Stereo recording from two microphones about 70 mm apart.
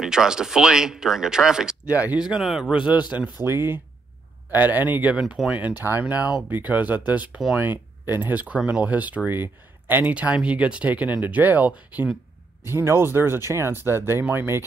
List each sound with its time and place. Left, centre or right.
0.0 s speech: centre
1.9 s speech: right
2.1 s speech: centre
3.4 s speech: right
5.1 s speech: centre
5.5 s speech: right
12.6 s speech: right